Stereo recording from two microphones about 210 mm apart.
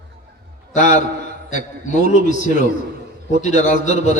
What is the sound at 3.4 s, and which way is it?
Speech, 35° left (ahead or behind).